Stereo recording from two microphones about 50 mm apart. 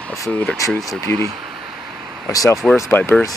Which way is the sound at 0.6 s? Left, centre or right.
Left.